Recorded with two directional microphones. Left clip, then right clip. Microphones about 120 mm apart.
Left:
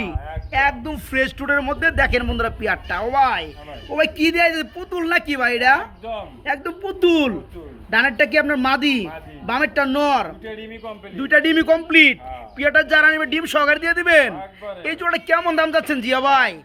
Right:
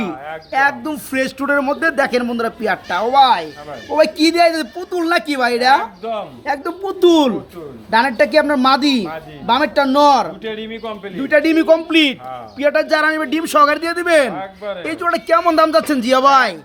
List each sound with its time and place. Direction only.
0.5 s a man's voice: 10° left (ahead or behind); by 6.7 s 25° left (ahead or behind)
6.8 s a child's voice: 70° left (ahead or behind)
7.9 s a man's voice: 25° left (ahead or behind)
10.4 s speech: 25° right (ahead or behind)
11.2 s a man's voice: 25° left (ahead or behind); by 14.3 s 5° left (ahead or behind)
14.3 s speech: 45° right (ahead or behind)
14.8 s speech: 5° left (ahead or behind)